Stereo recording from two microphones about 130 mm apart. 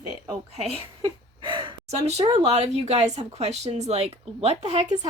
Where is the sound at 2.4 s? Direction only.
60° right (ahead or behind).